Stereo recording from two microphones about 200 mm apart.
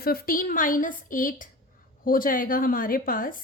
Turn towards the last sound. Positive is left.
turn(degrees=45)  # may be behind; listen again after turning